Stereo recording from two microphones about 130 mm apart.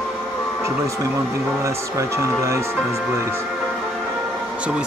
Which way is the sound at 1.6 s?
20° right (ahead or behind).